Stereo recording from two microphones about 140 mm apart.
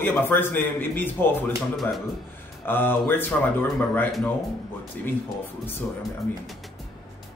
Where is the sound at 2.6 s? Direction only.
15° left (ahead or behind).